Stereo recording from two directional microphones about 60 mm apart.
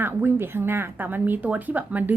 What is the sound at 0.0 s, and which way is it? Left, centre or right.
Speech, right.